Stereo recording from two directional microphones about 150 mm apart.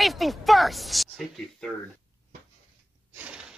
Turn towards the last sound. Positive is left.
turn(degrees=-5)  # may be behind; listen again after turning